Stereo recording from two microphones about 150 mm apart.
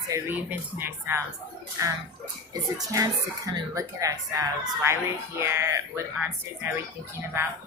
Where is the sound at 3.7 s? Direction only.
20° right (ahead or behind).